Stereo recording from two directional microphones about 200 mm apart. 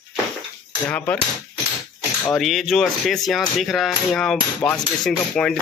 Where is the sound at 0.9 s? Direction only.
5° left (ahead or behind).